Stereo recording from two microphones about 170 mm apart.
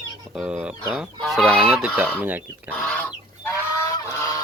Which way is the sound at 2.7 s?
5° left (ahead or behind).